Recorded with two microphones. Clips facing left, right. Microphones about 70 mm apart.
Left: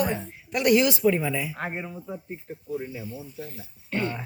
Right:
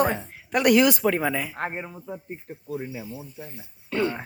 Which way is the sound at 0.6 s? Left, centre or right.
Right.